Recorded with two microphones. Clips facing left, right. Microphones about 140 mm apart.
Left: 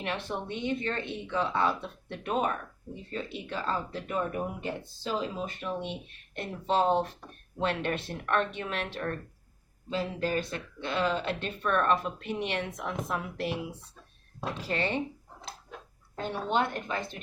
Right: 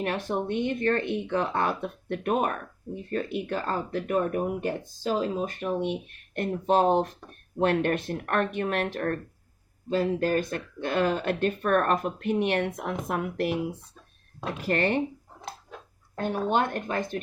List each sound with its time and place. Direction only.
0.0 s speech: 45° right (ahead or behind)
16.1 s speech: 50° right (ahead or behind)